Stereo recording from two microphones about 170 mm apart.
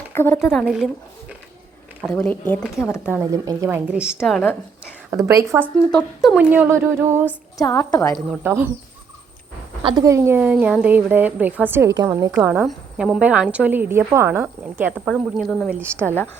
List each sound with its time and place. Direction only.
0.1 s a woman's voice: 15° left (ahead or behind)
0.5 s a woman's voice: 5° right (ahead or behind)
2.1 s speech: 10° left (ahead or behind)
3.0 s a woman's voice: 10° right (ahead or behind)
5.1 s a woman's voice: 20° right (ahead or behind)
5.9 s a woman's voice: centre (ahead or behind); by 7.3 s 15° right (ahead or behind)
7.6 s a woman's voice: 20° left (ahead or behind)
8.4 s a woman's voice: 15° right (ahead or behind)
9.8 s a woman's voice: 20° right (ahead or behind)
12.3 s a woman's voice: 10° right (ahead or behind)
15.1 s a woman's voice: 5° left (ahead or behind)
15.7 s a woman's voice: 15° right (ahead or behind)